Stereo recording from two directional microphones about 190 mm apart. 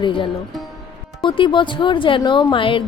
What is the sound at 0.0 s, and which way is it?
Speech, 25° left (ahead or behind).